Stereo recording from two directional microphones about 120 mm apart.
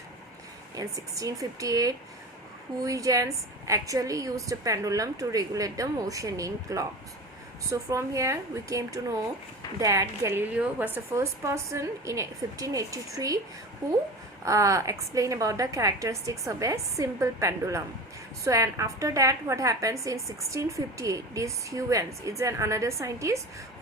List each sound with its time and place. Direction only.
0.8 s a woman's voice: 30° right (ahead or behind)
10.5 s a woman's voice: 15° right (ahead or behind); by 13.4 s 30° right (ahead or behind)
14.4 s a woman's voice: 25° right (ahead or behind)